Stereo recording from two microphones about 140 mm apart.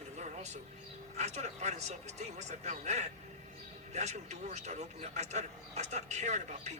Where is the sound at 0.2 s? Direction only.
55° right (ahead or behind).